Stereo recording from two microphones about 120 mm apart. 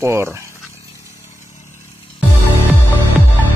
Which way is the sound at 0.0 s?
20° right (ahead or behind).